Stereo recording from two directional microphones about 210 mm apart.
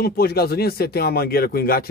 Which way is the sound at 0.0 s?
45° left (ahead or behind).